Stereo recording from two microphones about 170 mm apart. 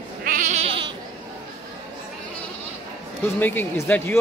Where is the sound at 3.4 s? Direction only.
10° left (ahead or behind).